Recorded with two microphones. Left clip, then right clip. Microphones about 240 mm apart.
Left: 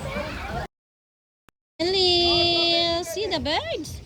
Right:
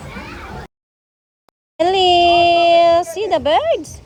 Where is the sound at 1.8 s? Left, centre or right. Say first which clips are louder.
Right 9 dB; centre.